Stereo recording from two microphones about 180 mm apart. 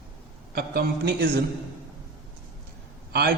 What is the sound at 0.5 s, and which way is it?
Speech, 55° right (ahead or behind).